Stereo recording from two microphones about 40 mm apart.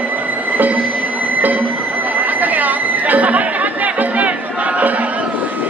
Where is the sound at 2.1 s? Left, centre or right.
Right.